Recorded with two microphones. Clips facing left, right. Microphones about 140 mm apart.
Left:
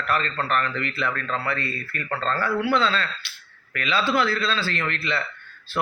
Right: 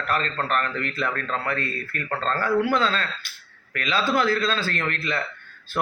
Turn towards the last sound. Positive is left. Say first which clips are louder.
# even
turn(degrees=-45)  # may be behind; listen again after turning